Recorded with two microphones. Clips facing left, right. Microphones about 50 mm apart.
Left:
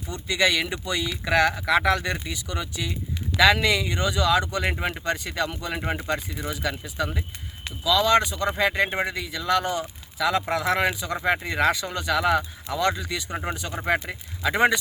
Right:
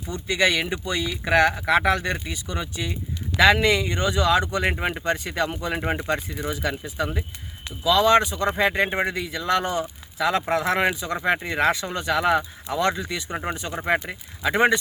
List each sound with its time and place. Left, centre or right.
0.1 s speech: right
4.7 s speech: centre
5.1 s speech: right
6.5 s speech: right
8.9 s speech: centre
9.1 s speech: right
13.3 s speech: centre
13.8 s speech: centre